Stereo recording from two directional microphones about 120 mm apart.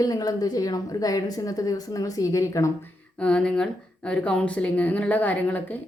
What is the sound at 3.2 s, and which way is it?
A woman's voice, 10° left (ahead or behind).